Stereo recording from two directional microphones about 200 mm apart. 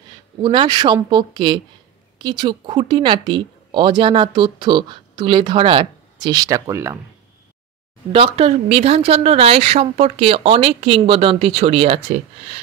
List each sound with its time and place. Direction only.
0.4 s speech: 25° right (ahead or behind)
8.1 s speech: 30° right (ahead or behind)